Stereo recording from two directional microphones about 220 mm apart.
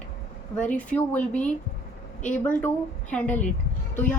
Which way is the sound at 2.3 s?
5° left (ahead or behind).